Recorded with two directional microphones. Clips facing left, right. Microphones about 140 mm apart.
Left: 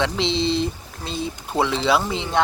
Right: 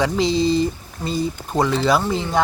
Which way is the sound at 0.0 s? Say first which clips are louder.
Right 4 dB; centre (ahead or behind).